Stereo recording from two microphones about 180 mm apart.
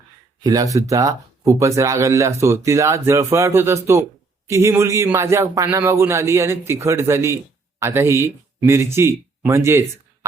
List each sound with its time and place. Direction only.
0.4 s a man's voice: 20° right (ahead or behind)